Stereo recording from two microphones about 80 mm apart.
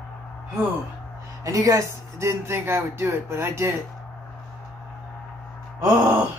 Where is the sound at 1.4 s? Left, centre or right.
Right.